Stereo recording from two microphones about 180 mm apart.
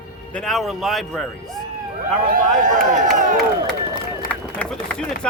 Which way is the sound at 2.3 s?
50° right (ahead or behind).